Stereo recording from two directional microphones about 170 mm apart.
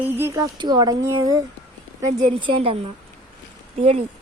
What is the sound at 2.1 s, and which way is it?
Speech, 35° right (ahead or behind).